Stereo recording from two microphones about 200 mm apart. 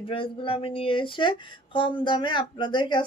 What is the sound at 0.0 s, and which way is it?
Speech, 25° left (ahead or behind).